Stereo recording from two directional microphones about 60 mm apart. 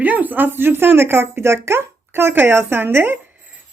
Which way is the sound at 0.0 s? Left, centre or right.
Right.